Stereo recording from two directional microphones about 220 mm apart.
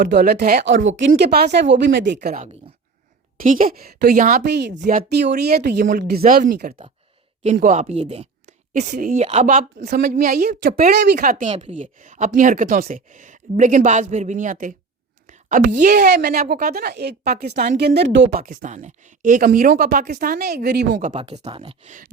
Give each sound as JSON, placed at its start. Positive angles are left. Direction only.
{"t": 0.0, "sound": "speech", "side_deg": -50}
{"t": 2.1, "sound": "a woman's voice", "side_deg": -35}
{"t": 15.3, "sound": "whispering", "side_deg": -35}
{"t": 15.7, "sound": "speech", "side_deg": -45}
{"t": 17.5, "sound": "a woman's voice", "side_deg": -35}
{"t": 17.7, "sound": "a woman's voice", "side_deg": -50}
{"t": 21.1, "sound": "speech", "side_deg": -30}